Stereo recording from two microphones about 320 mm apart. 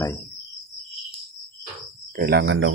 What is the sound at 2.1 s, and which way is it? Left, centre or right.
Speech, right.